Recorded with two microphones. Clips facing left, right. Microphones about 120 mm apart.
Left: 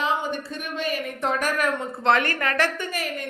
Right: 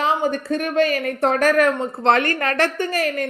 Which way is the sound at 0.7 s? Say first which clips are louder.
Right 8 dB; 90° right.